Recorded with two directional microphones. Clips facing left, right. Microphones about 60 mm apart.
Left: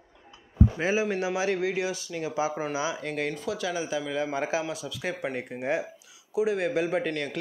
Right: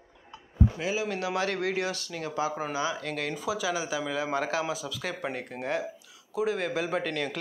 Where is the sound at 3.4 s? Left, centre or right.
Centre.